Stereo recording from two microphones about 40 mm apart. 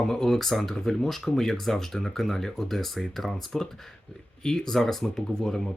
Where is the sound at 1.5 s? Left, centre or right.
Centre.